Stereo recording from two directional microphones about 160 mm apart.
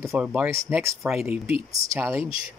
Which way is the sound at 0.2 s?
10° right (ahead or behind).